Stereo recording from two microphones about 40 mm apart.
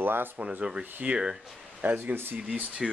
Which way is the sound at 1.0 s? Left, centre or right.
Right.